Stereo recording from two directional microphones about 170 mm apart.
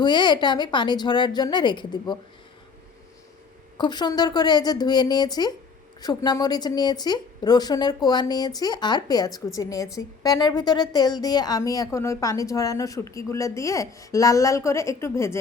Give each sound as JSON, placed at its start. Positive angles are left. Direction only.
{"t": 0.0, "sound": "a woman's voice", "side_deg": 25}
{"t": 3.8, "sound": "a woman's voice", "side_deg": 25}